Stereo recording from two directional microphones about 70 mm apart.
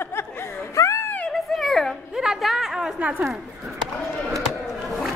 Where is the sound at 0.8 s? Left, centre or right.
Left.